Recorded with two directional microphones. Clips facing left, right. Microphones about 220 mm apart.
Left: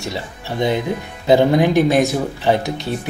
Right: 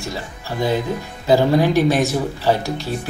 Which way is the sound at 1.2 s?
20° left (ahead or behind).